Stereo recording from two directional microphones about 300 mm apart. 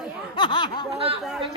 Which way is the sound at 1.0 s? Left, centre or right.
Centre.